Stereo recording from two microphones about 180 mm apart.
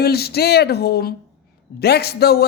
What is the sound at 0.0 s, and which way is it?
Speech, 60° left (ahead or behind).